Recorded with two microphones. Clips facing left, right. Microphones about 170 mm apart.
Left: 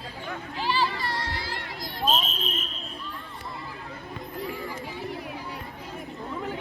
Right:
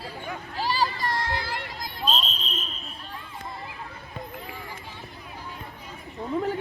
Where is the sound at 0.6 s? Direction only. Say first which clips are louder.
Right 1 dB; 40° right (ahead or behind).